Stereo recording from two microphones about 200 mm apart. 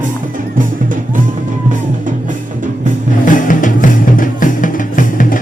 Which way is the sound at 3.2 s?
40° left (ahead or behind).